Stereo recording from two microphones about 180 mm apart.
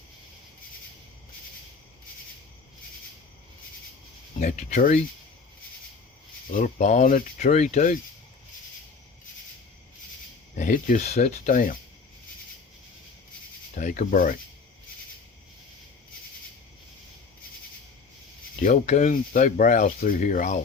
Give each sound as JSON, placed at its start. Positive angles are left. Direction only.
{"t": 4.4, "sound": "speech", "side_deg": 40}
{"t": 6.5, "sound": "speech", "side_deg": 45}
{"t": 10.5, "sound": "speech", "side_deg": 45}
{"t": 13.7, "sound": "speech", "side_deg": 45}
{"t": 18.6, "sound": "speech", "side_deg": 45}